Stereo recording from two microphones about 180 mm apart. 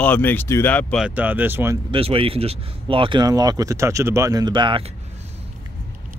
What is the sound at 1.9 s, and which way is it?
Speech, 30° right (ahead or behind).